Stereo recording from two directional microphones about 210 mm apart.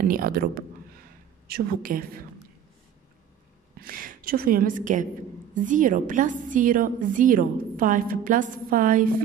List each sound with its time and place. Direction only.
0.0 s a woman's voice: 45° right (ahead or behind)
3.8 s a woman's voice: 45° right (ahead or behind)